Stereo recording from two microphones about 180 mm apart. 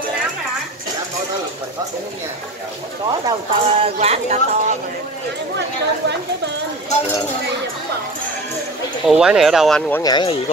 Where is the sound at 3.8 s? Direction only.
35° right (ahead or behind).